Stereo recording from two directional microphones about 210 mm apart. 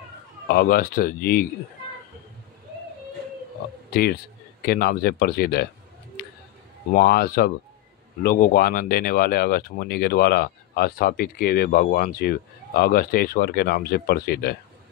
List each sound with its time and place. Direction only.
0.5 s speech: 45° left (ahead or behind)
3.9 s a man's voice: 45° left (ahead or behind)
6.9 s speech: 45° left (ahead or behind)